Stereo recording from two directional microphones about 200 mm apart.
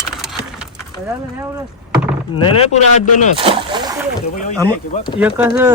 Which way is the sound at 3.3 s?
25° right (ahead or behind).